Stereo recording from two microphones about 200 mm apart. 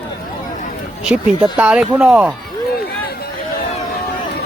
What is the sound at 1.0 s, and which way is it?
Speech, 5° right (ahead or behind).